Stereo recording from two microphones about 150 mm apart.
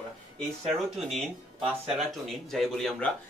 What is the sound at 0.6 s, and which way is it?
Speech, centre (ahead or behind).